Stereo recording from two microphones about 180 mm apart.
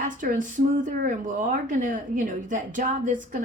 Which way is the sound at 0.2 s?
45° right (ahead or behind).